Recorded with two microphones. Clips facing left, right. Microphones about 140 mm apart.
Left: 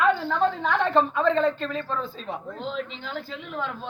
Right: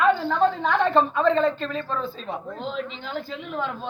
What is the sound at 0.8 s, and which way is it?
A woman's voice, 5° left (ahead or behind).